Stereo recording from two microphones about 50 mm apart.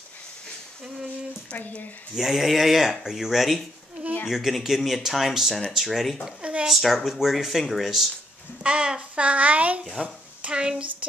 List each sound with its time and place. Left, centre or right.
1.5 s speech: left
2.1 s speech: centre
8.6 s speech: right
10.4 s a woman's voice: centre